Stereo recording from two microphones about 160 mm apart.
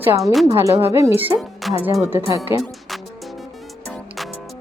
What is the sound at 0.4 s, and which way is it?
Speech, 20° right (ahead or behind).